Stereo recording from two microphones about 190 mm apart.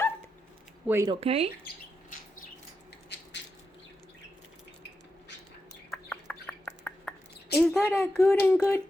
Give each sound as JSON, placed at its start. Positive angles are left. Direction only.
{"t": 0.9, "sound": "speech", "side_deg": -15}
{"t": 1.1, "sound": "speech", "side_deg": -30}
{"t": 3.1, "sound": "a sound", "side_deg": 65}
{"t": 5.9, "sound": "chicken", "side_deg": 5}
{"t": 7.5, "sound": "speech", "side_deg": 5}